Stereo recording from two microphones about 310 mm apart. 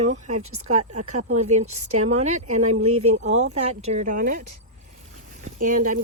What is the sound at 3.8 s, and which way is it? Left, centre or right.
Speech, right.